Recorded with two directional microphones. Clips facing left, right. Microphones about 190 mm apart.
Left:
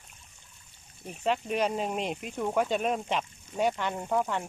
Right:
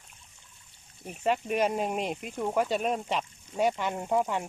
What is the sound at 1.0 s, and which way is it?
Speech, 5° right (ahead or behind).